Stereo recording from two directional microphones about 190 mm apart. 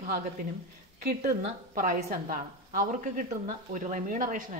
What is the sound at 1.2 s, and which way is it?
A woman's voice, 40° right (ahead or behind).